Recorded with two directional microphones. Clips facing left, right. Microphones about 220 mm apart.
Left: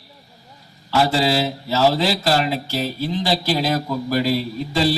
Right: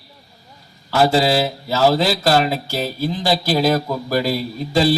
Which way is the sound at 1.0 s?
45° right (ahead or behind).